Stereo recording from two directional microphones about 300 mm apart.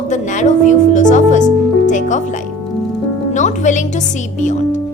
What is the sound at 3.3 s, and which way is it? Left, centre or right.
Speech, left.